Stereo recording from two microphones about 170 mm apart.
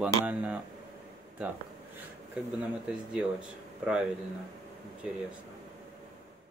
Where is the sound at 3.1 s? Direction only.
5° right (ahead or behind).